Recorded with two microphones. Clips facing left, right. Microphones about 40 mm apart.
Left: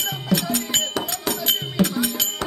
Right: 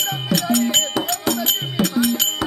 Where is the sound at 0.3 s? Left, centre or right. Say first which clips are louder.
Right 4 dB; centre.